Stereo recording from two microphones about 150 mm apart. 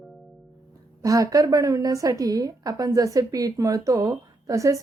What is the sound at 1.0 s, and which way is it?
A woman's voice, 25° right (ahead or behind).